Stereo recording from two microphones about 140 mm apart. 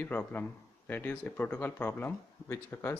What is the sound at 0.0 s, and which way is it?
Speech, 15° left (ahead or behind).